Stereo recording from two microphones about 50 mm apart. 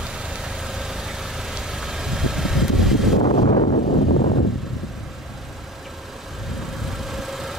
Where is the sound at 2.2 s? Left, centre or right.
Centre.